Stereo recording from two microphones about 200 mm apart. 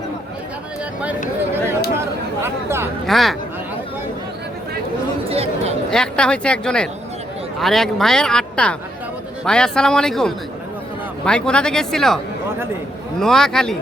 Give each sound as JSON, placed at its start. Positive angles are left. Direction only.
{"t": 2.4, "sound": "speech", "side_deg": -10}
{"t": 3.1, "sound": "speech", "side_deg": 0}
{"t": 5.3, "sound": "chatter", "side_deg": -30}
{"t": 5.9, "sound": "speech", "side_deg": 5}